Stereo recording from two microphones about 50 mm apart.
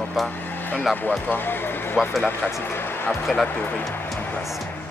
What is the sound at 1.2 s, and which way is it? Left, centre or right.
Speech, left.